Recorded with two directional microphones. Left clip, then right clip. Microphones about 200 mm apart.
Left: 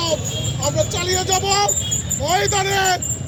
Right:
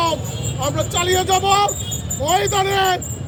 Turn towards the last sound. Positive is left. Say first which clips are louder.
# right 1 dB
turn(degrees=-15)  # may be behind; listen again after turning